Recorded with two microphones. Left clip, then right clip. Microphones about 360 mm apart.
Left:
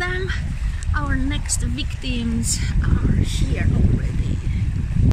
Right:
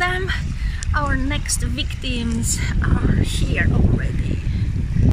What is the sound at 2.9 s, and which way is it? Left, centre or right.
Speech, right.